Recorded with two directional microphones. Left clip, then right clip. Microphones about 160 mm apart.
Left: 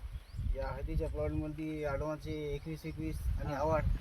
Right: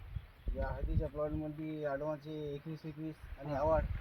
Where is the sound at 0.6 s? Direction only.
20° left (ahead or behind).